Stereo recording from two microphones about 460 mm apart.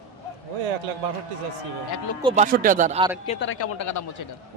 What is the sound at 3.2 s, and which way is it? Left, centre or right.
Speech, centre.